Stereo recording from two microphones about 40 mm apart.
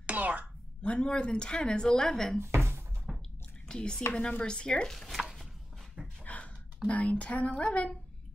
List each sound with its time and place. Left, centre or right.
0.0 s a sound: right
0.8 s a woman's voice: left
2.4 s a sound: right
3.1 s drip: centre
3.6 s a woman's voice: centre
4.8 s speech: centre
5.2 s chopping: centre
6.2 s a sound: left
6.9 s speech: left